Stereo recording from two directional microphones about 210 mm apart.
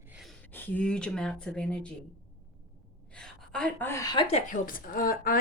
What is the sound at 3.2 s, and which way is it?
A woman's voice, 5° left (ahead or behind).